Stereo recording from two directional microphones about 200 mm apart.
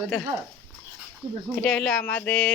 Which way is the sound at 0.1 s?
5° left (ahead or behind).